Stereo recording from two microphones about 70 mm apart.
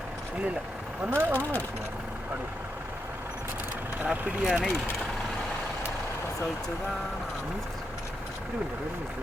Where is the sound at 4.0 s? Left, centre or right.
Right.